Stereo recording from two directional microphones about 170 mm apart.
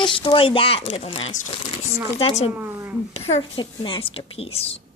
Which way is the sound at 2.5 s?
10° right (ahead or behind).